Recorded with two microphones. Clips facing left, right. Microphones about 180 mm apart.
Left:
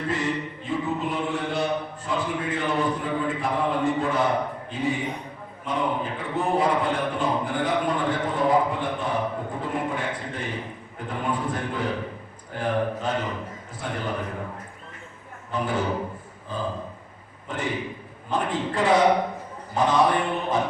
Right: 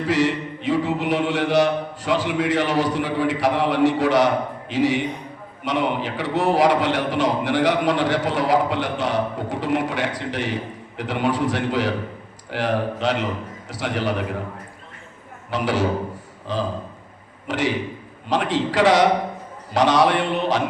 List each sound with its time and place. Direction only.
0.1 s a sound: 90° right
5.6 s a man's voice: 80° right
15.4 s a man's voice: 85° right